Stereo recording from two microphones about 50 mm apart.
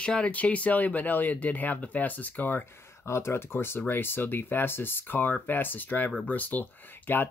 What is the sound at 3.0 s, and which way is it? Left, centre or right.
Speech, left.